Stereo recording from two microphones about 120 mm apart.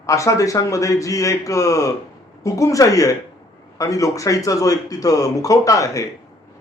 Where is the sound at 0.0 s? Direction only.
25° left (ahead or behind).